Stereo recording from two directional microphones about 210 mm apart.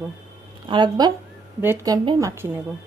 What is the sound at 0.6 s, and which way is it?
Speech, 20° right (ahead or behind).